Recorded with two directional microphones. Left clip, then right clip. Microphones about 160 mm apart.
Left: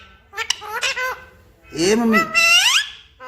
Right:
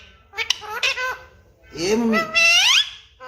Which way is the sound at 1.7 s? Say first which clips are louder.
Left 4 dB; 55° left (ahead or behind).